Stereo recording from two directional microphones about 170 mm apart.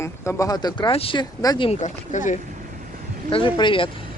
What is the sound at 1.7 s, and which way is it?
Speech, 45° left (ahead or behind).